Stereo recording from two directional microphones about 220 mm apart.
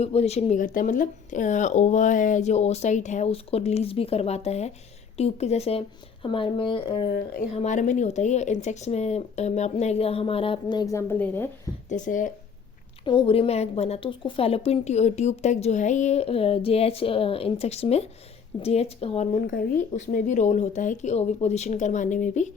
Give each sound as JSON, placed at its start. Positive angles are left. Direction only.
{"t": 0.0, "sound": "a woman's voice", "side_deg": 30}
{"t": 11.9, "sound": "speech", "side_deg": 35}
{"t": 13.1, "sound": "a woman's voice", "side_deg": 25}